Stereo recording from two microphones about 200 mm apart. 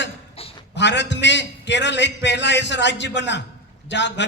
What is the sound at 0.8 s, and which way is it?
A man's voice, 60° left (ahead or behind).